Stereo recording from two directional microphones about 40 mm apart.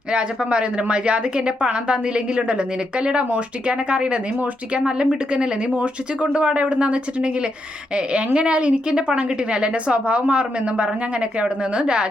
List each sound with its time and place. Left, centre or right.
0.1 s speech: right